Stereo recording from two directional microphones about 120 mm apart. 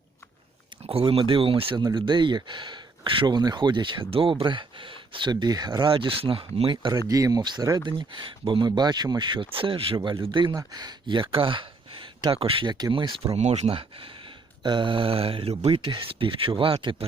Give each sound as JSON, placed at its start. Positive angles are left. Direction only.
{"t": 0.9, "sound": "speech", "side_deg": -55}
{"t": 1.8, "sound": "speech", "side_deg": -35}
{"t": 7.1, "sound": "speech", "side_deg": -30}
{"t": 10.5, "sound": "speech", "side_deg": -30}
{"t": 13.3, "sound": "speech", "side_deg": -65}
{"t": 14.6, "sound": "speech", "side_deg": -40}